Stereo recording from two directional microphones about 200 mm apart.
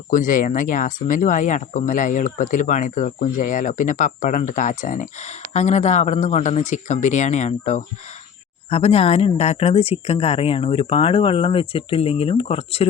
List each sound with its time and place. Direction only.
0.1 s speech: 40° left (ahead or behind)